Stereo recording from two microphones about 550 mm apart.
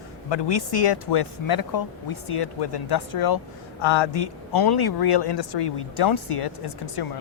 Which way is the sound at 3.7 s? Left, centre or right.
Left.